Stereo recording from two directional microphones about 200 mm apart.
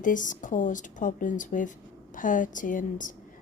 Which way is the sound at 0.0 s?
40° left (ahead or behind).